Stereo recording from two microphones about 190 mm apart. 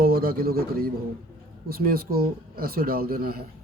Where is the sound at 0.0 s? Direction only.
50° right (ahead or behind).